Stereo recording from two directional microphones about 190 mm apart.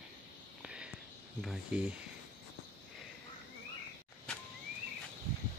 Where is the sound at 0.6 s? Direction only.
5° right (ahead or behind).